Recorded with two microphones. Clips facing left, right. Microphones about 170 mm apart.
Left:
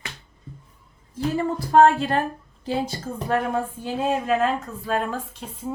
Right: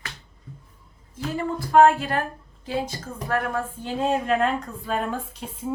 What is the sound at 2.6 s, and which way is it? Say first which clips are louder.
A woman's voice: left 2 dB; 30° left (ahead or behind).